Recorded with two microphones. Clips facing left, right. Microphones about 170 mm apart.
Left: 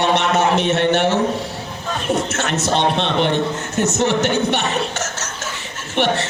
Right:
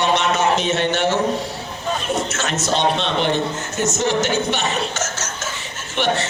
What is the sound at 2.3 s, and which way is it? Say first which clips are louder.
A man's voice: left 2 dB; 60° left (ahead or behind).